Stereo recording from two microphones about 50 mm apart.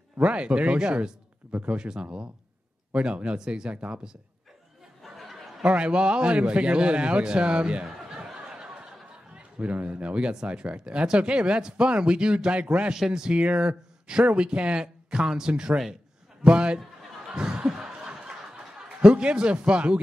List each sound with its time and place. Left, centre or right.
0.2 s speech: right
3.7 s speech: right
5.0 s a sound: centre
5.6 s speech: right
7.8 s a sound: centre
9.6 s speech: right
12.9 s speech: centre
13.4 s speech: right
17.3 s snicker: centre